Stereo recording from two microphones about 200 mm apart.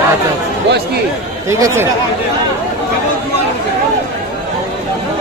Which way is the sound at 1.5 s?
15° right (ahead or behind).